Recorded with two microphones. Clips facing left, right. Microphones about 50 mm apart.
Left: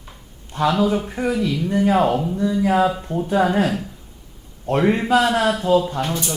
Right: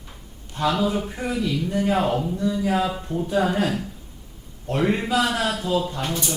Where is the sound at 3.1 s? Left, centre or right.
Left.